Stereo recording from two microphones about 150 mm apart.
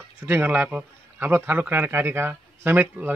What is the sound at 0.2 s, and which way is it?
Speech, 10° right (ahead or behind).